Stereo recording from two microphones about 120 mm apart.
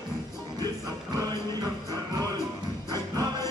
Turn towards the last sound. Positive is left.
turn(degrees=-30)  # may be behind; listen again after turning